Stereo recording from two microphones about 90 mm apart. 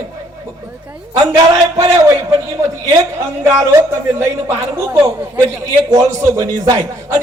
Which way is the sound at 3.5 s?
35° right (ahead or behind).